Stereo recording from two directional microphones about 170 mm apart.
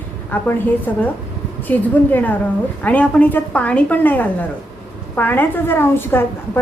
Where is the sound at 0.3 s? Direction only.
10° left (ahead or behind).